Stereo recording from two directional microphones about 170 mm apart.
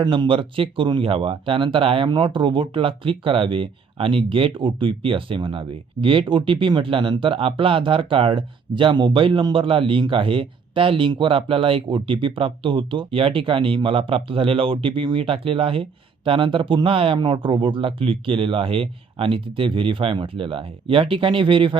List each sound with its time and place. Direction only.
0.0 s speech: 30° right (ahead or behind)